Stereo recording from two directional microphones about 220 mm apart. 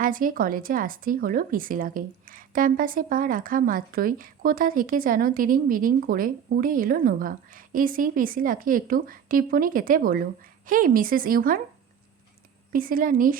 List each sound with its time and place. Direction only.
0.0 s speech: 40° right (ahead or behind)
12.7 s speech: 40° right (ahead or behind)